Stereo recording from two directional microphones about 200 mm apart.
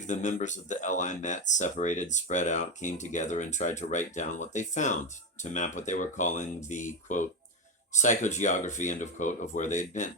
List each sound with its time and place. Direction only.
0.0 s speech: 40° left (ahead or behind)